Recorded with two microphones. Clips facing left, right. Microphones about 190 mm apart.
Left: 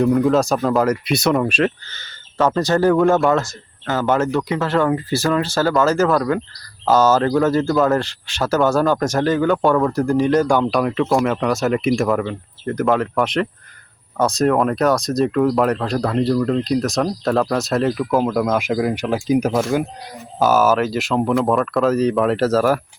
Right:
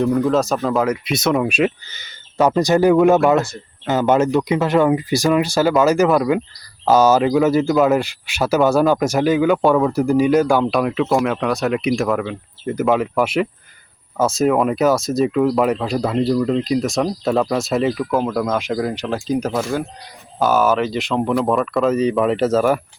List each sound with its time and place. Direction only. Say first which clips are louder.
0.0 s speech: left 1 dB; centre (ahead or behind)